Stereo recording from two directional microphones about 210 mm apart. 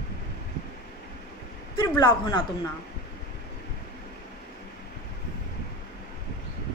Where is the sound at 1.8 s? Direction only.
20° left (ahead or behind).